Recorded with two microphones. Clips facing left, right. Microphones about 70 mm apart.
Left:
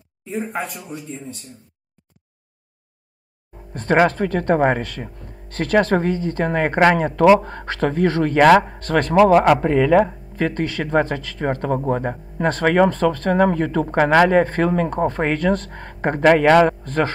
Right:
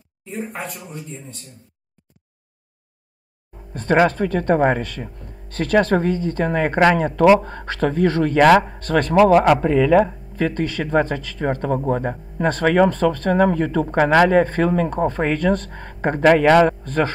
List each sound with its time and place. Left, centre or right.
0.2 s speech: centre
3.7 s speech: left
8.4 s a man's voice: left